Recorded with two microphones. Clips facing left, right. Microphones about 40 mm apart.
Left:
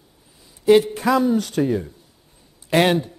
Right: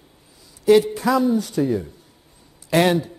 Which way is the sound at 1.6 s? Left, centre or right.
Left.